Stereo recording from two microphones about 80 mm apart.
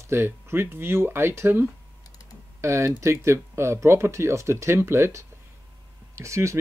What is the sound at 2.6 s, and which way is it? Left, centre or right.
Speech, right.